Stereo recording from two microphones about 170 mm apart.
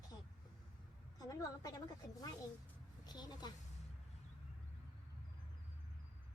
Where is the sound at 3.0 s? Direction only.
25° left (ahead or behind).